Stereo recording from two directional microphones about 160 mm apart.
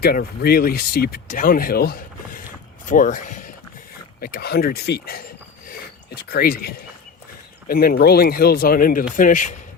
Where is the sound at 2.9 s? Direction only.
55° left (ahead or behind).